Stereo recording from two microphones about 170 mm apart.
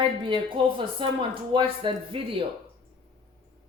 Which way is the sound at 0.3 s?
30° right (ahead or behind).